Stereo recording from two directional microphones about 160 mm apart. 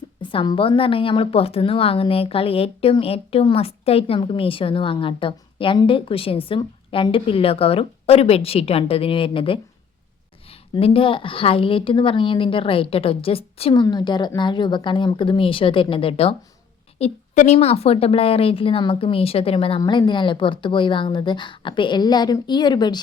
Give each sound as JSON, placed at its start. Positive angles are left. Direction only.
{"t": 0.2, "sound": "a woman's voice", "side_deg": 30}